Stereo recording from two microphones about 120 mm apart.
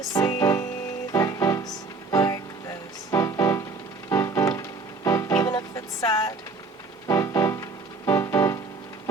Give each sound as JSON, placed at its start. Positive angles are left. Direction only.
{"t": 0.1, "sound": "music", "side_deg": 30}